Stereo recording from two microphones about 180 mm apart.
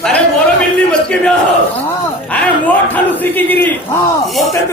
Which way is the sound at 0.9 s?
5° left (ahead or behind).